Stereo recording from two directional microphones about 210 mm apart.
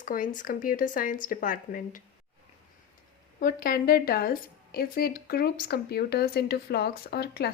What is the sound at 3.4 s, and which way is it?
A woman's voice, 45° left (ahead or behind).